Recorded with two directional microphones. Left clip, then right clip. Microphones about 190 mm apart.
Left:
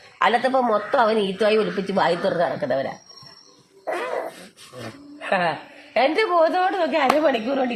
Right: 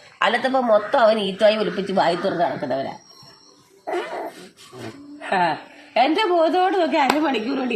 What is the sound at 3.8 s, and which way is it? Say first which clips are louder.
Dog: left 1 dB; 25° left (ahead or behind).